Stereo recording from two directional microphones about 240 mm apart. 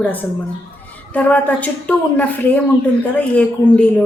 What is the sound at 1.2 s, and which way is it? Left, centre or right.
A woman's voice, centre.